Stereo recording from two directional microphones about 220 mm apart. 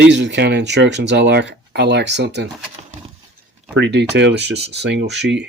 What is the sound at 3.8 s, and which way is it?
Speech, 50° right (ahead or behind).